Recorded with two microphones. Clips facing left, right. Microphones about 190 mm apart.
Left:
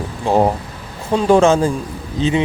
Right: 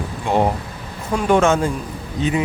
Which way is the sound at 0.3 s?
35° left (ahead or behind).